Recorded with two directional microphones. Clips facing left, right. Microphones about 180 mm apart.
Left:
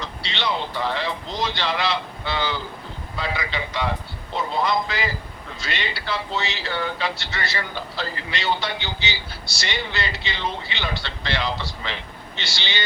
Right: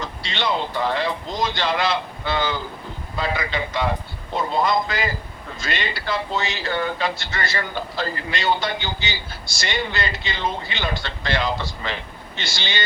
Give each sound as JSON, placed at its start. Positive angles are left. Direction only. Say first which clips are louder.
{"t": 0.0, "sound": "speech", "louder": "right 2 dB", "side_deg": -50}